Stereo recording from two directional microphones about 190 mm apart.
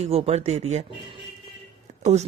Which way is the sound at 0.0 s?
35° right (ahead or behind).